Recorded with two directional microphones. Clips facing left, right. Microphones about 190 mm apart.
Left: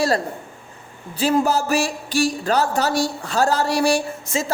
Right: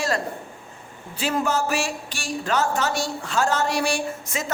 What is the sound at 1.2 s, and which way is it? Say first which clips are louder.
Speech: left 5 dB; 35° left (ahead or behind).